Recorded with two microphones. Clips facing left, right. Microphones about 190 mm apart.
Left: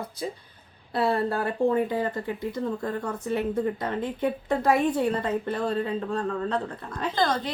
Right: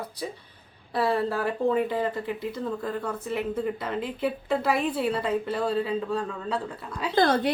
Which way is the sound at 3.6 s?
10° right (ahead or behind).